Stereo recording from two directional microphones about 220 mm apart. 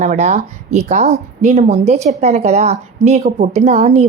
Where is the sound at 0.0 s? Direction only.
35° right (ahead or behind).